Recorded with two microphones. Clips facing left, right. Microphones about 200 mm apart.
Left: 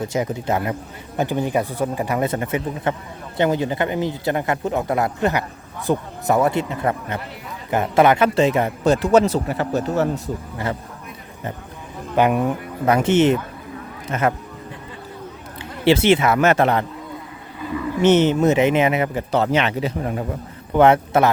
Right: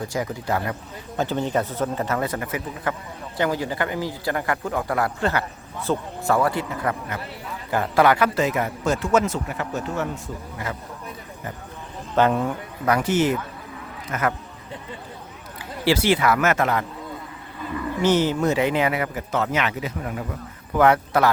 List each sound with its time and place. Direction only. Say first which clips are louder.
0.0 s a man's voice: left 4 dB; 20° left (ahead or behind)
12.1 s a man's voice: left 2 dB; 15° left (ahead or behind)
15.8 s a man's voice: left 4 dB; 25° left (ahead or behind)
18.0 s a man's voice: left 5 dB; 20° left (ahead or behind)